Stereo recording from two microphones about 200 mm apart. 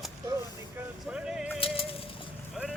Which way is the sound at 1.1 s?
5° right (ahead or behind).